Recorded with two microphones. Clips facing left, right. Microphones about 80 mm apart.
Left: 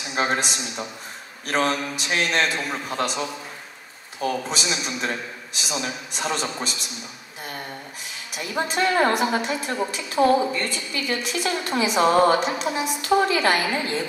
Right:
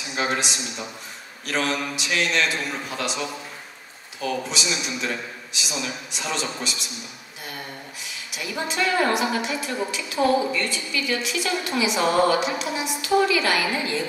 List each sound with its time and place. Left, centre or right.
0.1 s a woman's voice: left
8.4 s a woman's voice: left
13.7 s a woman's voice: left